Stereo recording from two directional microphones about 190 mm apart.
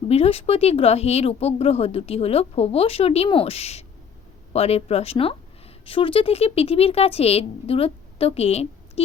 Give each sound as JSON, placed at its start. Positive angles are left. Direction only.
{"t": 0.1, "sound": "speech", "side_deg": 30}